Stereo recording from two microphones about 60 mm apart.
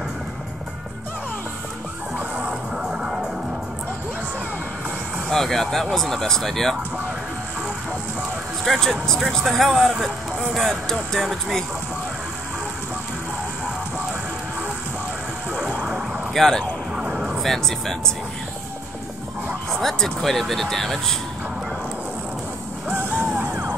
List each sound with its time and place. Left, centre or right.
2.3 s music: centre
5.3 s speech: centre
8.6 s speech: centre
15.6 s a sound: centre
16.3 s speech: centre
16.9 s a sound: centre
17.4 s speech: centre
19.7 s speech: centre
23.2 s music: right